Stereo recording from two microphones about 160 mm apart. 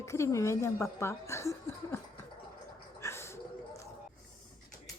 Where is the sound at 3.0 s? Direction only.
15° left (ahead or behind).